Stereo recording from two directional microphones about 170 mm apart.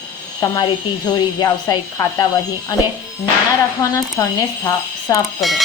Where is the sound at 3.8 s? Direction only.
20° left (ahead or behind).